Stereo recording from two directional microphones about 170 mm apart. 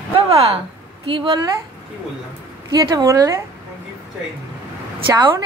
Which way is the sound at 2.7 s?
20° right (ahead or behind).